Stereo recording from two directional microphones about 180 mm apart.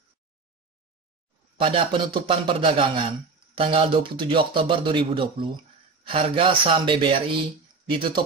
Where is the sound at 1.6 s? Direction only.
30° right (ahead or behind).